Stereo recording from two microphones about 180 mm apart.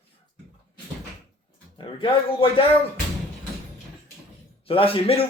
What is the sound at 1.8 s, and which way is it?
Speech, 30° left (ahead or behind).